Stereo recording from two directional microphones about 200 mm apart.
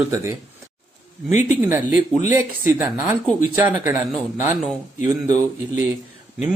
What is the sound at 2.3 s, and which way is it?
Speech, 10° right (ahead or behind).